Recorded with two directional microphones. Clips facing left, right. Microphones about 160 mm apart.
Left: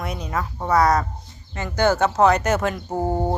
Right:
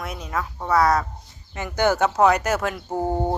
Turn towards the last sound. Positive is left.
turn(degrees=10)  # may be behind; listen again after turning